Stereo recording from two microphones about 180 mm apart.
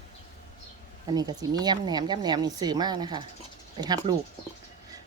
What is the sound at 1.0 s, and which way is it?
Speech, 20° right (ahead or behind).